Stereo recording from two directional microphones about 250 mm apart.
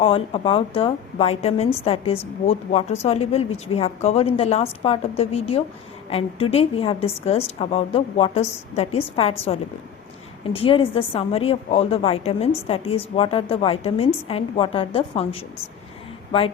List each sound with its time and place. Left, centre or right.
0.0 s a woman's voice: left
10.5 s a woman's voice: left